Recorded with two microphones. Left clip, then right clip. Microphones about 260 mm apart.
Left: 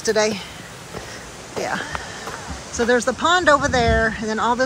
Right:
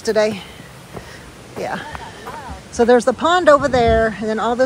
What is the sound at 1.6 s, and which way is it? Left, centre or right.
Speech, centre.